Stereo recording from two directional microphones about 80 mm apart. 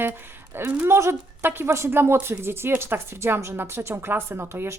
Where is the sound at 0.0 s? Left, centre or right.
Right.